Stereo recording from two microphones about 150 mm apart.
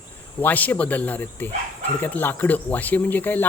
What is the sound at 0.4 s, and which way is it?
Speech, 10° left (ahead or behind).